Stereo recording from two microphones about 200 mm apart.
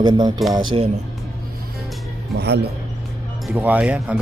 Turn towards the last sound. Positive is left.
turn(degrees=-5)  # may be behind; listen again after turning